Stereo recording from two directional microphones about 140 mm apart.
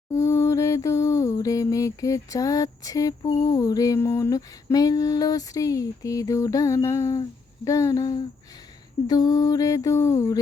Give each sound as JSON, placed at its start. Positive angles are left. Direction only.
{"t": 0.1, "sound": "mantra", "side_deg": 20}